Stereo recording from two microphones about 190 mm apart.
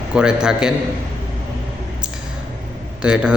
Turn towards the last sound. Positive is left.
turn(degrees=-5)  # may be behind; listen again after turning